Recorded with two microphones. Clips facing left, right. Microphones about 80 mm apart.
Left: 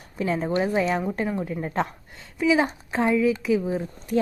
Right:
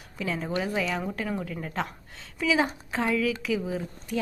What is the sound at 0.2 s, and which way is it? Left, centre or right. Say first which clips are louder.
A woman's voice: left 6 dB; left.